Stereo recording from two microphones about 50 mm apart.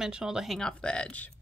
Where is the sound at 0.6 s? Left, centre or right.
Centre.